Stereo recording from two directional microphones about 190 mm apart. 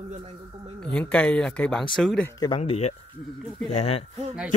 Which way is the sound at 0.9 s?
5° left (ahead or behind).